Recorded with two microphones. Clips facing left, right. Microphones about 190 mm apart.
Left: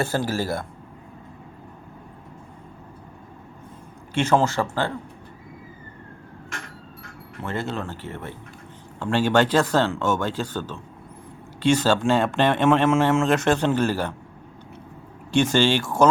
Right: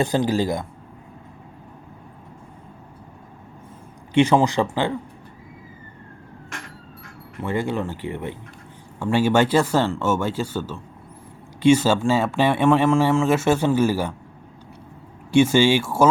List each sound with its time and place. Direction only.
0.0 s speech: 15° right (ahead or behind)
4.1 s speech: 15° right (ahead or behind)
7.4 s speech: 10° right (ahead or behind)
15.3 s speech: 10° right (ahead or behind)